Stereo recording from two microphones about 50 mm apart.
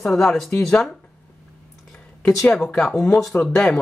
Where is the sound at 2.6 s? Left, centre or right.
Centre.